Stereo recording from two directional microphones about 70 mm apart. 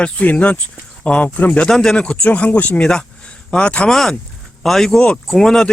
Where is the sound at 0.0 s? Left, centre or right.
Centre.